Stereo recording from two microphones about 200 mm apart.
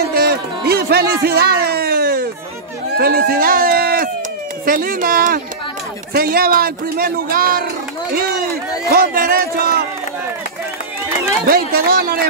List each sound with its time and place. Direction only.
0.1 s a sound: 50° right (ahead or behind)
3.0 s a man's voice: 50° right (ahead or behind)
8.9 s a man's voice: 45° right (ahead or behind)
11.4 s a man's voice: 45° right (ahead or behind)